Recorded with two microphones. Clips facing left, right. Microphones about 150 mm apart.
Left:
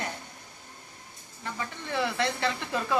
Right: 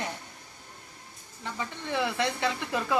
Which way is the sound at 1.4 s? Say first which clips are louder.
Even; 15° right (ahead or behind).